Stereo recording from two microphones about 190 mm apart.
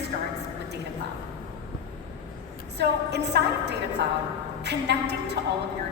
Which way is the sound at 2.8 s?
60° right (ahead or behind).